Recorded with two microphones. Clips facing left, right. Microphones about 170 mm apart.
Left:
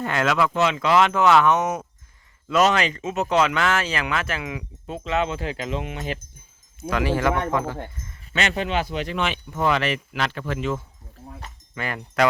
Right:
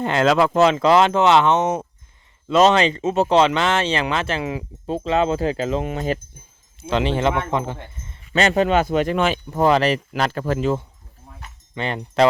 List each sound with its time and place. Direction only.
0.0 s speech: 30° right (ahead or behind)
6.8 s speech: 25° right (ahead or behind)
8.3 s speech: 40° right (ahead or behind)
11.7 s speech: 25° right (ahead or behind)